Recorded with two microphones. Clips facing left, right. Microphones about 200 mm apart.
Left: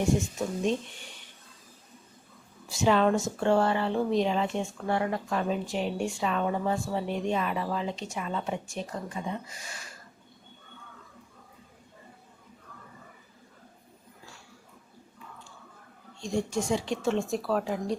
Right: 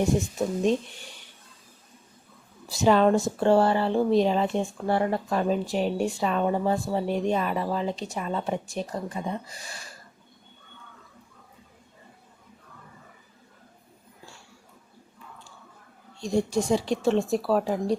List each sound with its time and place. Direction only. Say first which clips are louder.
2.6 s speech: right 4 dB; 35° right (ahead or behind)
16.2 s speech: right 4 dB; 35° right (ahead or behind)